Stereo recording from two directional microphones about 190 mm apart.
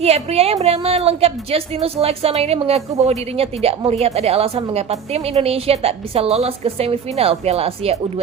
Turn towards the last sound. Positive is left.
turn(degrees=-30)  # may be behind; listen again after turning